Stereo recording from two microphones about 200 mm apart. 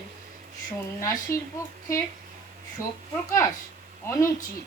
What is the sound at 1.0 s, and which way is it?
Speech, 15° left (ahead or behind).